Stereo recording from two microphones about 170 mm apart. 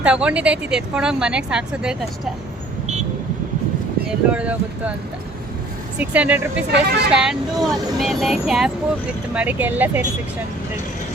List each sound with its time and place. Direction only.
0.0 s speech: 5° right (ahead or behind)
4.3 s speech: 10° right (ahead or behind)
6.0 s speech: 10° right (ahead or behind)
6.7 s speech: 80° right
7.1 s speech: 5° right (ahead or behind)